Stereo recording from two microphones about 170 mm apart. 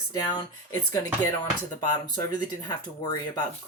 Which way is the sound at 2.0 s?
25° left (ahead or behind).